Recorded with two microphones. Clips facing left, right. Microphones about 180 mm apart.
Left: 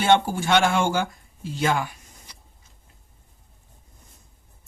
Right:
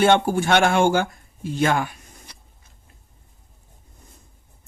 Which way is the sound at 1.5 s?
55° right (ahead or behind).